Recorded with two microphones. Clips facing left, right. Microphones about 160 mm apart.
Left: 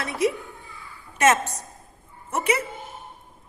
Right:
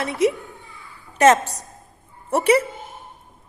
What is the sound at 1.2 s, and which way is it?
A woman's voice, 35° right (ahead or behind).